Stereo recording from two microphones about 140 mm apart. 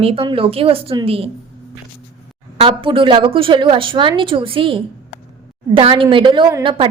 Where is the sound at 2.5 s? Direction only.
40° right (ahead or behind).